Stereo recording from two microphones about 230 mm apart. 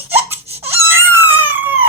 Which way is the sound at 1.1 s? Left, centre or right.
Centre.